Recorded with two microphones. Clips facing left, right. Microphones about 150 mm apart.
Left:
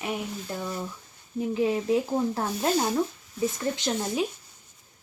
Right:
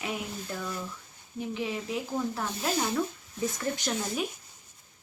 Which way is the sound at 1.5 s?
40° left (ahead or behind).